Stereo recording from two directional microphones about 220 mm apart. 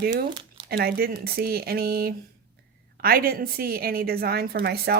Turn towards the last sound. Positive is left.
turn(degrees=-45)  # may be behind; listen again after turning